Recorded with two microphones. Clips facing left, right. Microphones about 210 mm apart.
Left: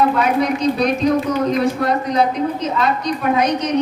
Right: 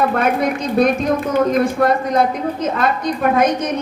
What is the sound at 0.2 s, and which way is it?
Speech, 50° right (ahead or behind).